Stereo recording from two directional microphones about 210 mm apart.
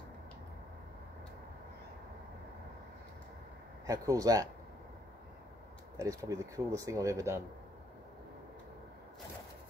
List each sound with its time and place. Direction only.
3.8 s speech: 15° right (ahead or behind)
5.9 s speech: 15° right (ahead or behind)